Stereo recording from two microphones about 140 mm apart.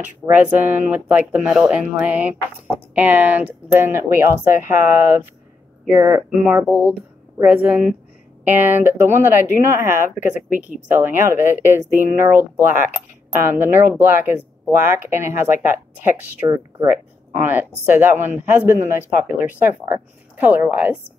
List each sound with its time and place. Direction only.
0.3 s speech: 10° right (ahead or behind)